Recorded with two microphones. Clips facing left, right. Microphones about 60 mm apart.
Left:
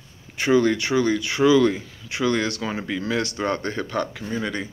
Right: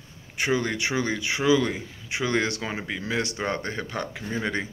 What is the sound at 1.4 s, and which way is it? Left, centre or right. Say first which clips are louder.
Speech: left 5 dB; centre.